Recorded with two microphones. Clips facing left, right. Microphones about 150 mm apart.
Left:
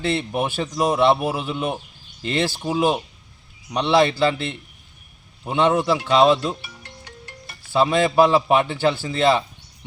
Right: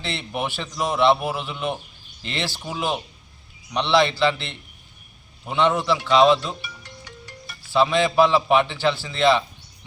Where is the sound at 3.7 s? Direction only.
45° left (ahead or behind).